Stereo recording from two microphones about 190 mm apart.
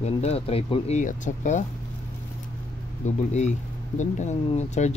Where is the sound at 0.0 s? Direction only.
35° left (ahead or behind).